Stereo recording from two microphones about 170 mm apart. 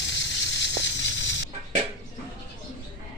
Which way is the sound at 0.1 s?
90° left.